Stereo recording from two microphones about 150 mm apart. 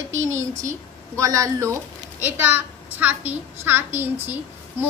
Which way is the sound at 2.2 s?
10° right (ahead or behind).